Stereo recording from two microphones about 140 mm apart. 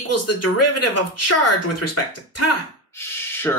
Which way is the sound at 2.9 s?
15° left (ahead or behind).